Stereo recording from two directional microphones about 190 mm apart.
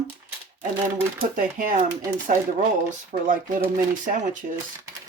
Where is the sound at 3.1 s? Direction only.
45° right (ahead or behind).